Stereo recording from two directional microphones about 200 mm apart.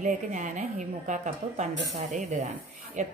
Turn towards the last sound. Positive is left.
turn(degrees=-40)  # may be behind; listen again after turning